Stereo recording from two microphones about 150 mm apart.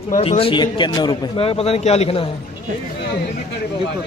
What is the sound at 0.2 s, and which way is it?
A man's voice, 40° left (ahead or behind).